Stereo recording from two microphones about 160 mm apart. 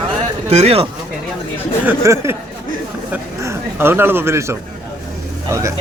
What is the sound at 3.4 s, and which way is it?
Speech, 15° right (ahead or behind).